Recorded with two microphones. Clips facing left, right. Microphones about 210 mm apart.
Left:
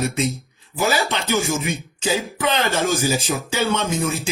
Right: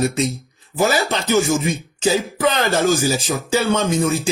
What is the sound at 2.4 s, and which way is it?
Speech, 45° right (ahead or behind).